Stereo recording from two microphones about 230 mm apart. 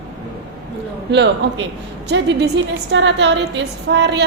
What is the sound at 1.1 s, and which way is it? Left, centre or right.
A woman's voice, right.